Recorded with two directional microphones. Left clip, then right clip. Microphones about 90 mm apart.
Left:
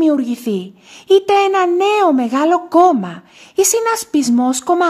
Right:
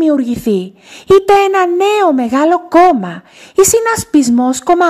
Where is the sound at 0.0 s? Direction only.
35° right (ahead or behind).